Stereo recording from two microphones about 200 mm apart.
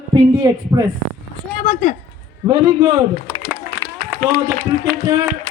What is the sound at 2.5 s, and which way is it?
Speech, 20° right (ahead or behind).